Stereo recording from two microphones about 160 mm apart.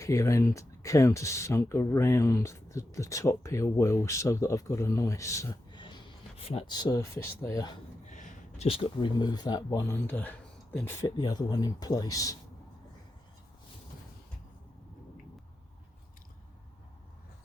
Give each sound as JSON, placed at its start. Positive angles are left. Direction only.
{"t": 0.0, "sound": "speech", "side_deg": 20}
{"t": 5.8, "sound": "speech", "side_deg": 30}
{"t": 8.0, "sound": "speech", "side_deg": 45}
{"t": 10.1, "sound": "speech", "side_deg": 10}